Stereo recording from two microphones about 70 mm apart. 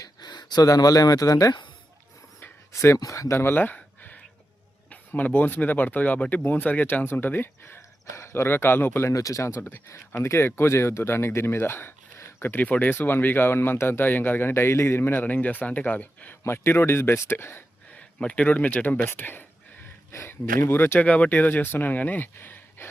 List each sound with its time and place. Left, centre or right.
0.0 s speech: left
2.7 s speech: left
3.4 s a sound: left
4.9 s speech: left
9.0 s speech: left
16.4 s speech: left
17.9 s speech: centre
19.0 s a sound: left
20.1 s speech: left
21.0 s speech: left